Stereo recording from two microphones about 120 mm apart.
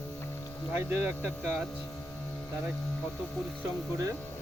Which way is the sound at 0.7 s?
15° right (ahead or behind).